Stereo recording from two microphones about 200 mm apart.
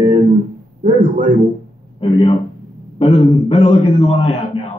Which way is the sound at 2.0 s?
25° left (ahead or behind).